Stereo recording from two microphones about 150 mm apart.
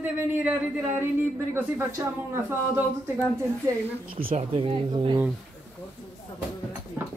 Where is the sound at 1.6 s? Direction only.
15° right (ahead or behind).